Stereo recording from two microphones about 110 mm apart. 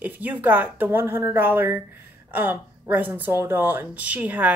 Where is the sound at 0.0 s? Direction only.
15° right (ahead or behind).